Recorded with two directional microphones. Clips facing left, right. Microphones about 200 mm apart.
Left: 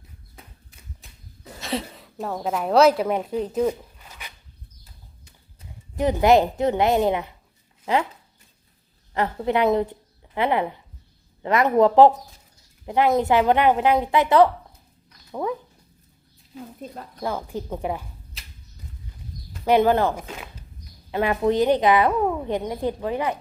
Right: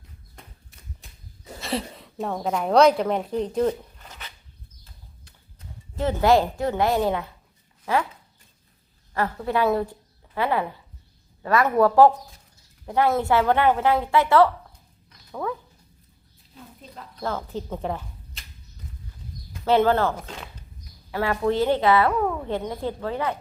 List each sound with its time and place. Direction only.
0.3 s a sound: centre (ahead or behind)
1.6 s a woman's voice: centre (ahead or behind); by 7.3 s 20° left (ahead or behind)
9.1 s a woman's voice: 20° left (ahead or behind)
16.8 s speech: 50° left (ahead or behind)
17.2 s speech: 10° left (ahead or behind)
19.6 s a woman's voice: 15° left (ahead or behind)
21.1 s a woman's voice: 20° left (ahead or behind)